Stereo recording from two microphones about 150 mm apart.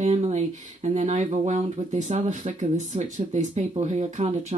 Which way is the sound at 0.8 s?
50° right (ahead or behind).